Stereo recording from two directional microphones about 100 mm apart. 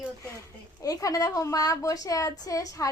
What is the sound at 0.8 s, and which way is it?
A woman's voice, 35° left (ahead or behind).